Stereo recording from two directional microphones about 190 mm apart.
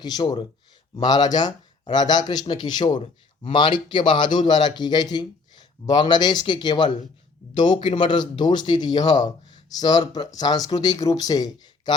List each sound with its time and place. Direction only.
0.0 s speech: 20° left (ahead or behind)
2.9 s speech: 40° left (ahead or behind)
3.5 s speech: 25° left (ahead or behind)